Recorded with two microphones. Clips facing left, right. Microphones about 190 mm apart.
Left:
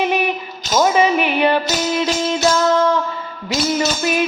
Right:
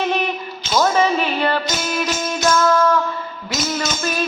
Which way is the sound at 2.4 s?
30° left (ahead or behind).